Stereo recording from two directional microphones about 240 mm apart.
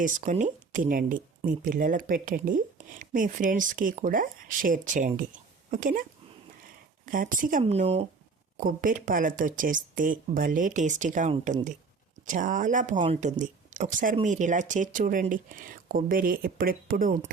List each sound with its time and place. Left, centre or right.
0.0 s speech: right